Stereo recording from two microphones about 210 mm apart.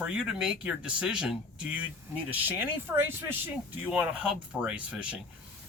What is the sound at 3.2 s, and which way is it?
Speech, 10° right (ahead or behind).